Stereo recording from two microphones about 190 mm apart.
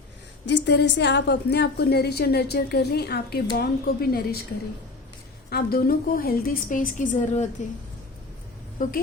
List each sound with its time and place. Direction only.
0.4 s a woman's voice: 65° left (ahead or behind)
5.5 s a woman's voice: 55° left (ahead or behind)